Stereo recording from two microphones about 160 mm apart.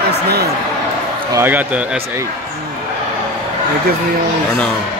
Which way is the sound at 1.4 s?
10° right (ahead or behind).